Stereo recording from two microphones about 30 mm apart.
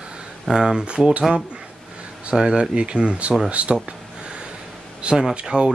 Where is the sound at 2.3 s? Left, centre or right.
Right.